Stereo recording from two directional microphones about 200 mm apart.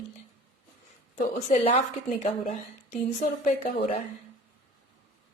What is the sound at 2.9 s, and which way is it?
A woman's voice, 40° left (ahead or behind).